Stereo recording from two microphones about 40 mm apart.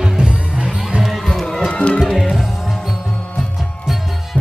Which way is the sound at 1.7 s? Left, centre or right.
Left.